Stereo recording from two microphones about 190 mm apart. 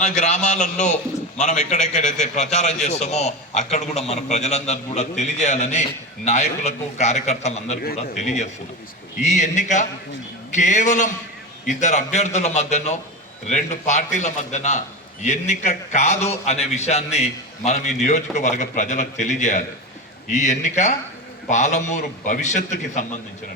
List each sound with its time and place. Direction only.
0.2 s a man's voice: 40° left (ahead or behind)
7.8 s speech: 50° left (ahead or behind)
8.1 s a man's voice: 35° left (ahead or behind)